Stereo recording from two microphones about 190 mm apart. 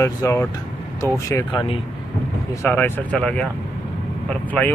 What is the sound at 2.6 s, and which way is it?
Speech, 10° left (ahead or behind).